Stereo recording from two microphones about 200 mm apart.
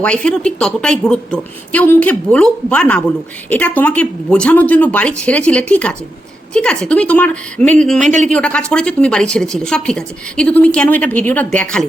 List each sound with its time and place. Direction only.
0.0 s a woman's voice: 5° left (ahead or behind)
8.0 s speech: 35° right (ahead or behind)
8.3 s a woman's voice: 5° left (ahead or behind)